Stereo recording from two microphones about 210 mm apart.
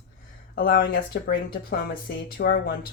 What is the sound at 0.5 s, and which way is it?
Speech, 45° left (ahead or behind).